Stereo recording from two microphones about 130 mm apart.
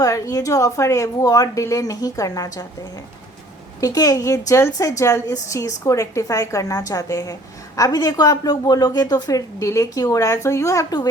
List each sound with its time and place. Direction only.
0.0 s a woman's voice: 25° left (ahead or behind)
3.8 s a woman's voice: 25° left (ahead or behind)